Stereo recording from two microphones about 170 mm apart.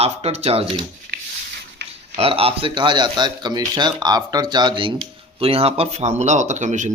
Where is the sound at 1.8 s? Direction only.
90° right.